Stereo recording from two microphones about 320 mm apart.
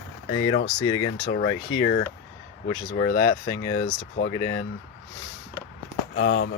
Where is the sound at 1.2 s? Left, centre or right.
Left.